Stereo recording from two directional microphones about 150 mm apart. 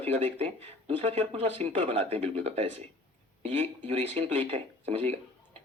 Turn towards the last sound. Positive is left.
turn(degrees=-40)  # may be behind; listen again after turning